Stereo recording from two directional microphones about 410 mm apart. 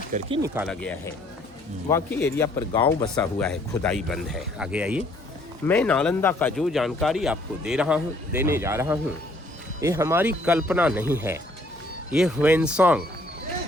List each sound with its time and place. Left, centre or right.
0.1 s speech: centre